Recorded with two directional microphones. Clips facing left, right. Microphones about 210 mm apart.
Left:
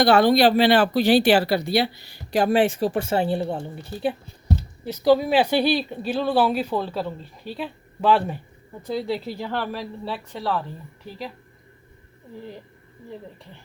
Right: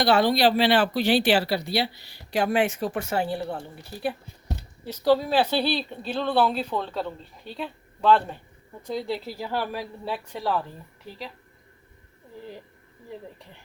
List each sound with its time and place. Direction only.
0.0 s speech: 50° left (ahead or behind); by 3.6 s 25° left (ahead or behind)
4.9 s speech: 10° left (ahead or behind); by 10.6 s 10° right (ahead or behind)